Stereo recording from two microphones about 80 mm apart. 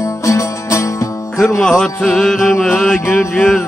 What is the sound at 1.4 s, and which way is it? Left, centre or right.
Mantra, centre.